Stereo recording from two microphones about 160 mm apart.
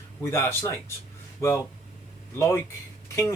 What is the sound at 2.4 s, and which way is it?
Speech, 15° left (ahead or behind).